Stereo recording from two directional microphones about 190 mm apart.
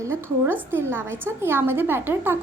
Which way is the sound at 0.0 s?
10° right (ahead or behind).